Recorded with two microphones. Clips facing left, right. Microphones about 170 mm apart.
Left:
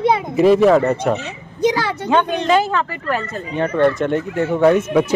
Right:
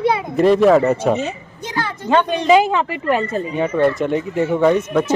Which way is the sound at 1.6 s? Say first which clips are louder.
Left 7 dB; 90° left.